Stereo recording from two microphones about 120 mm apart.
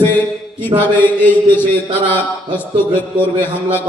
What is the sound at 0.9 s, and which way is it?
Speech, 15° left (ahead or behind).